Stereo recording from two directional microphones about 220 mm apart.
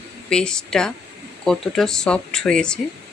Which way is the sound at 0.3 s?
5° left (ahead or behind).